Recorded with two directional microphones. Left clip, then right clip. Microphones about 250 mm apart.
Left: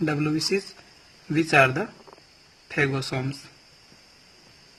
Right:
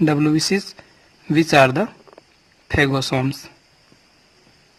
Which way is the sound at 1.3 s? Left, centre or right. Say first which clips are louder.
Right 5 dB; right.